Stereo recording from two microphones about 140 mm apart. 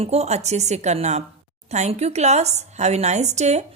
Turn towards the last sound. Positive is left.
turn(degrees=-55)  # may be behind; listen again after turning